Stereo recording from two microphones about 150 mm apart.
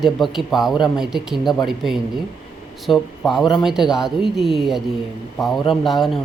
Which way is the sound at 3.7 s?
5° right (ahead or behind).